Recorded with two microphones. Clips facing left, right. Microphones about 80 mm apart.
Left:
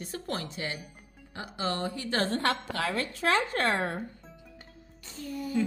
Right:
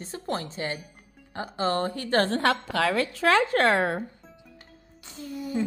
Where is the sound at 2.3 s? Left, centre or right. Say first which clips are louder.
Right 5 dB; right.